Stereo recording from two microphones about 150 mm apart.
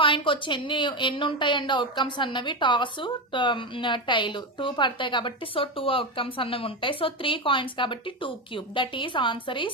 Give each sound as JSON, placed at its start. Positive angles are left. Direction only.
{"t": 0.0, "sound": "speech", "side_deg": 35}